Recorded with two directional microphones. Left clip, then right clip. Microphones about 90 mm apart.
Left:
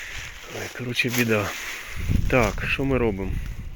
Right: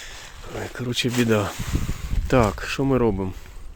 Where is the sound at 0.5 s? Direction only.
90° right.